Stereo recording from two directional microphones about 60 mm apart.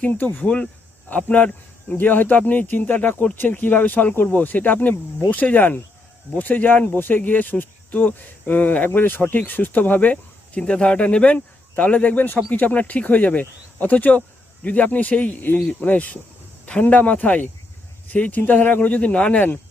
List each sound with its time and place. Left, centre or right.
0.0 s speech: left